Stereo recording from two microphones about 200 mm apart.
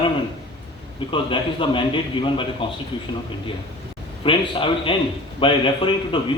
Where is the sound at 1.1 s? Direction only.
25° left (ahead or behind).